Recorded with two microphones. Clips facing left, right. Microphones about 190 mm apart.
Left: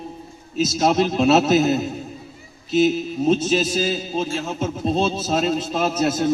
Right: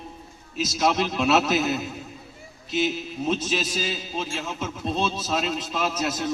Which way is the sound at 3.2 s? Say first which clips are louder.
Left 7 dB; 30° left (ahead or behind).